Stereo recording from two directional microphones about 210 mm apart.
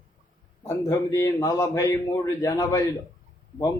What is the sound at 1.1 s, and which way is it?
A man's voice, 15° left (ahead or behind).